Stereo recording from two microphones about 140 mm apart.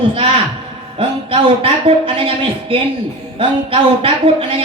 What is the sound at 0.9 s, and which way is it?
A woman's voice, 40° right (ahead or behind).